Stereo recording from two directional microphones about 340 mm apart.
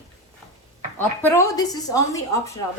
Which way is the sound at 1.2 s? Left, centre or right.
Centre.